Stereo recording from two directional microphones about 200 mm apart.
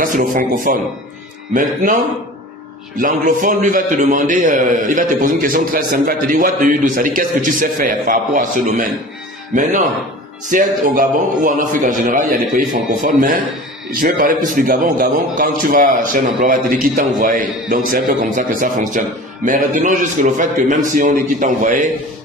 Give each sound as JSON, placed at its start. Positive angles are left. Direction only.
{"t": 0.0, "sound": "a man's voice", "side_deg": -45}
{"t": 3.0, "sound": "a man's voice", "side_deg": -40}